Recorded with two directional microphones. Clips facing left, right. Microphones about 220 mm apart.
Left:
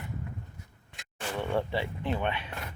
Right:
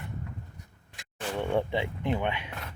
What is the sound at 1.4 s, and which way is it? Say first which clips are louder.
Speech: right 2 dB; 15° right (ahead or behind).